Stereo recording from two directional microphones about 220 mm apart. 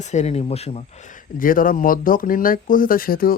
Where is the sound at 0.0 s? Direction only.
30° left (ahead or behind).